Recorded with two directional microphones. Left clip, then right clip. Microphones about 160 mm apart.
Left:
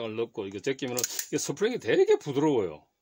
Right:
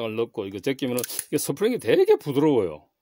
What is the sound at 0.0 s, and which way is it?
Speech, 45° right (ahead or behind).